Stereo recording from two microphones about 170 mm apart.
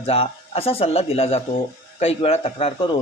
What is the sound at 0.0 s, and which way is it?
A man's voice, 35° left (ahead or behind).